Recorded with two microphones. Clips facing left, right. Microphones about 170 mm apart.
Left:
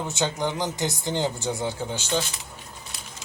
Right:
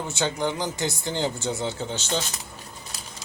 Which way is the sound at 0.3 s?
15° left (ahead or behind).